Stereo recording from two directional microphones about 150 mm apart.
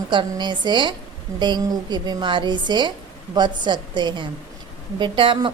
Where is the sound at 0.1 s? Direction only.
30° right (ahead or behind).